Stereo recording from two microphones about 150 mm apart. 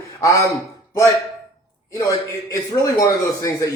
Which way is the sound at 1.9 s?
20° left (ahead or behind).